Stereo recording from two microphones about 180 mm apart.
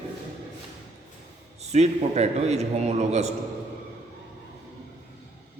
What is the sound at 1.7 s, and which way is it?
A man's voice, 35° right (ahead or behind).